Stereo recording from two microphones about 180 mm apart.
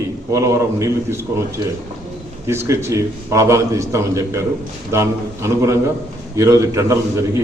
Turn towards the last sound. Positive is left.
turn(degrees=-15)  # may be behind; listen again after turning